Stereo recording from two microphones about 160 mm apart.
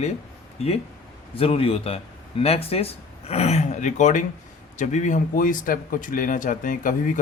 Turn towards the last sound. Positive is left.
turn(degrees=55)  # may be behind; listen again after turning